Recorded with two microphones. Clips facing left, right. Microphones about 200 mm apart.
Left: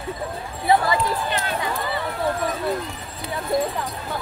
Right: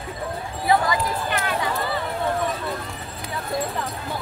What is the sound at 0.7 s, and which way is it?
Run, 25° left (ahead or behind).